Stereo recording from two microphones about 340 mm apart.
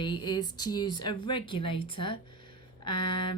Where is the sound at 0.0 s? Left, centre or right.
Centre.